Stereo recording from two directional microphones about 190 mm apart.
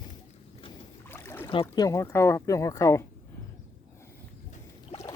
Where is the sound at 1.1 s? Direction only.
10° left (ahead or behind).